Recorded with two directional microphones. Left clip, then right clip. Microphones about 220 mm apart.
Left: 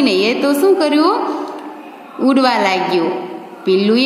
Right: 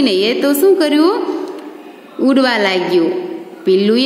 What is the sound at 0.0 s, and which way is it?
A woman's voice, 20° right (ahead or behind).